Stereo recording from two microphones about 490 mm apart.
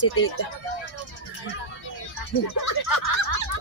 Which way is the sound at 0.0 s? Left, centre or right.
Left.